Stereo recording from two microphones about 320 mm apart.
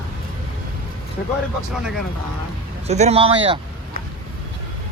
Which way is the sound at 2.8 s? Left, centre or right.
Centre.